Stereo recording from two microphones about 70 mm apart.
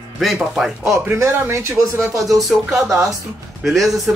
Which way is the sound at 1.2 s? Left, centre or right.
Right.